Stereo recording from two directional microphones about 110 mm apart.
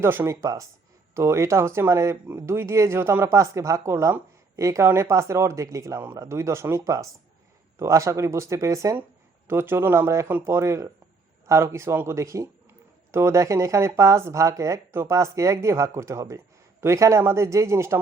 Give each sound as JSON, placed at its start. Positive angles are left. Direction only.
{"t": 0.0, "sound": "speech", "side_deg": -20}